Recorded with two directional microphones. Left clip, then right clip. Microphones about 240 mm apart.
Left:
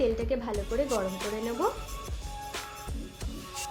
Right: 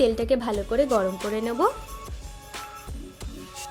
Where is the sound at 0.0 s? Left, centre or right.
Right.